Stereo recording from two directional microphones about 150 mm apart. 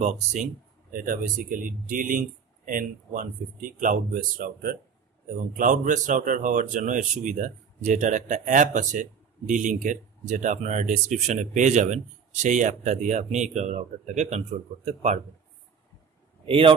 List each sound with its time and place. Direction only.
0.0 s speech: 50° right (ahead or behind)
0.9 s speech: 65° right (ahead or behind)
5.6 s speech: 60° right (ahead or behind)
16.4 s a man's voice: 35° right (ahead or behind)